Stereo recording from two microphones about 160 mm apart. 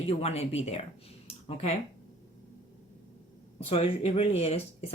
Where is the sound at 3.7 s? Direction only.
40° left (ahead or behind).